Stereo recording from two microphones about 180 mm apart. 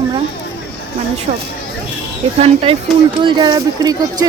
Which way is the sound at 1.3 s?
40° right (ahead or behind).